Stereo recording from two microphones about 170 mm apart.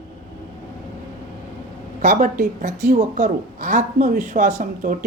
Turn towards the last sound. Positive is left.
turn(degrees=-50)  # may be behind; listen again after turning